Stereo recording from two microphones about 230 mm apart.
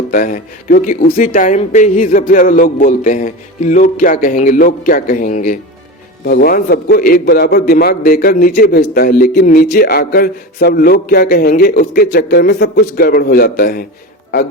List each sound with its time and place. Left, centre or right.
0.1 s a man's voice: left